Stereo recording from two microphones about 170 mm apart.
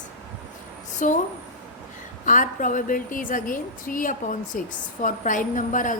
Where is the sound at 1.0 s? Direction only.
50° left (ahead or behind).